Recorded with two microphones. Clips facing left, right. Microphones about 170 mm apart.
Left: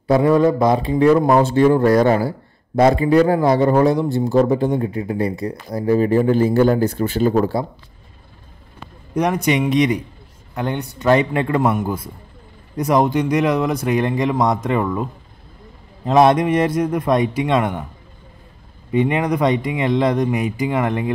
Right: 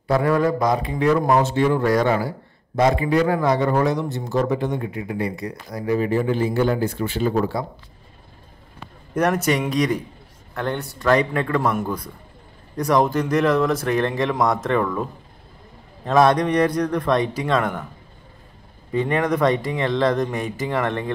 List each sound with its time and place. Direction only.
0.1 s a man's voice: 20° left (ahead or behind); by 7.6 s 40° left (ahead or behind)
9.1 s a man's voice: 10° left (ahead or behind)
9.4 s speech: centre (ahead or behind)
11.0 s a man's voice: 25° left (ahead or behind)
11.6 s speech: centre (ahead or behind)
13.0 s speech: centre (ahead or behind)
13.3 s speech: 15° left (ahead or behind)
13.7 s speech: 5° left (ahead or behind)
14.8 s speech: 10° left (ahead or behind)
16.1 s a man's voice: 20° left (ahead or behind)
18.9 s speech: 15° left (ahead or behind)